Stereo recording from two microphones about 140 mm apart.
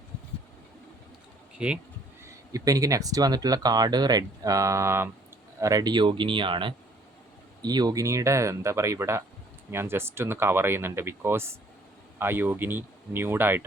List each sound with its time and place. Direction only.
1.5 s speech: 10° right (ahead or behind)
2.2 s speech: 25° right (ahead or behind)